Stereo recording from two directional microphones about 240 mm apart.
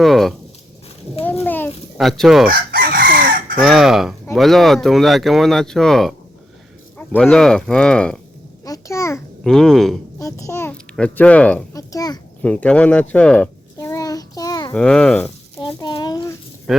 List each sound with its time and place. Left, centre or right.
0.0 s a sound: centre
1.2 s chicken: centre
2.5 s chicken: right
3.6 s a child's voice: centre
10.2 s a child's voice: centre
12.4 s a sound: centre
14.7 s speech: centre
15.6 s a sound: centre
16.7 s speech: centre